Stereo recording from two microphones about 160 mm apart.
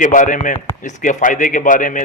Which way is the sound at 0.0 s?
55° left (ahead or behind).